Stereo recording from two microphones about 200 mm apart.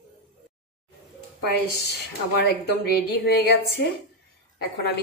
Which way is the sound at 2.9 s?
55° left (ahead or behind).